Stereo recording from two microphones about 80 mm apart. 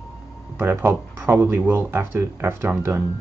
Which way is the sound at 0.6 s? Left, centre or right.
Right.